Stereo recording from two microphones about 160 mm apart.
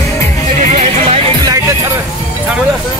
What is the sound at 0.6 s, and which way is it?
Music, 45° right (ahead or behind).